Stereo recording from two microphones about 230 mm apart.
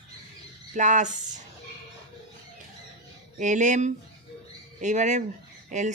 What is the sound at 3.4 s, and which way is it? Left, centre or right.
Speech, right.